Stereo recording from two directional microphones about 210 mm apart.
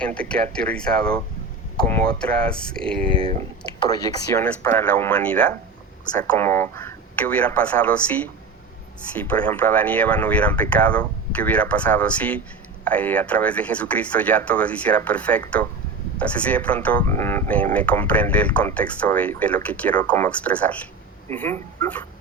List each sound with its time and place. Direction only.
0.0 s speech: 5° left (ahead or behind)
3.1 s speech: 25° right (ahead or behind)
3.8 s speech: 15° left (ahead or behind)